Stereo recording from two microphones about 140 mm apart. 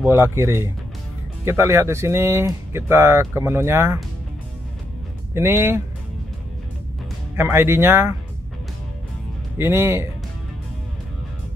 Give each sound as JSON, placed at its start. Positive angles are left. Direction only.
{"t": 0.0, "sound": "speech", "side_deg": -15}
{"t": 5.3, "sound": "speech", "side_deg": -20}
{"t": 7.3, "sound": "speech", "side_deg": -15}
{"t": 9.6, "sound": "speech", "side_deg": -15}